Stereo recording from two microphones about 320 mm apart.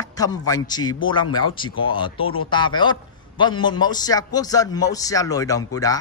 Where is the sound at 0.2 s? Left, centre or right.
Centre.